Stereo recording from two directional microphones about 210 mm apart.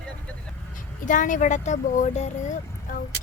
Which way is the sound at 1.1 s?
40° left (ahead or behind).